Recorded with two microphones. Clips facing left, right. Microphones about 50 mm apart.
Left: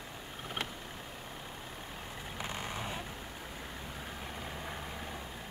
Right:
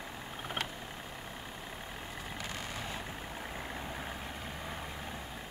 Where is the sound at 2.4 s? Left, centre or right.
Centre.